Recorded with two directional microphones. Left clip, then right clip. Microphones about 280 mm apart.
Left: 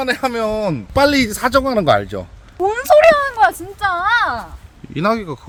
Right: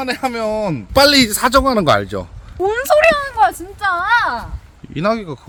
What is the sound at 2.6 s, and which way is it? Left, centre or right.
A man's voice, centre.